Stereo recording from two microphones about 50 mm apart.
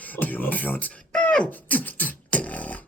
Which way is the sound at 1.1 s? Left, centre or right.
Centre.